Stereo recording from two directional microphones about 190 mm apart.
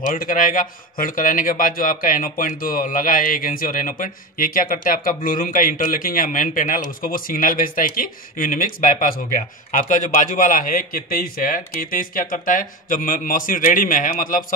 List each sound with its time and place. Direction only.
0.1 s a man's voice: 45° left (ahead or behind)